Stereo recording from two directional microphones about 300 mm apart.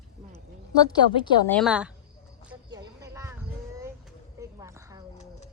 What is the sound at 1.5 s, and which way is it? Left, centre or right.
Speech, centre.